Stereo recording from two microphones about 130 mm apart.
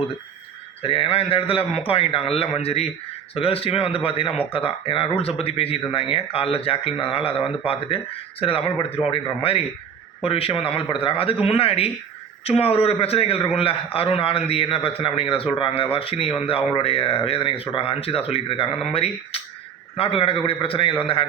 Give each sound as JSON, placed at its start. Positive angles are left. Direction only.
{"t": 0.8, "sound": "speech", "side_deg": 45}